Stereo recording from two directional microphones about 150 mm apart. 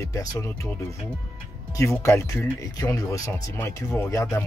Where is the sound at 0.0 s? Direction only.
20° left (ahead or behind).